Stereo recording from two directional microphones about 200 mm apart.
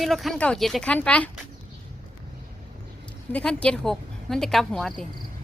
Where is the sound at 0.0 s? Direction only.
Centre (ahead or behind).